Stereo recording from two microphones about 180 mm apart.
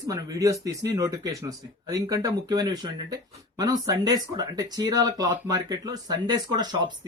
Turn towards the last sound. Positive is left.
turn(degrees=-25)  # may be behind; listen again after turning